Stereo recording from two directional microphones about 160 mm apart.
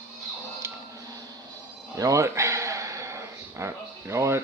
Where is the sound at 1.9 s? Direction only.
20° right (ahead or behind).